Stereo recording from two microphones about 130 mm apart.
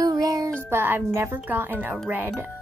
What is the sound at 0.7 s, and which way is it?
Speech, 15° right (ahead or behind).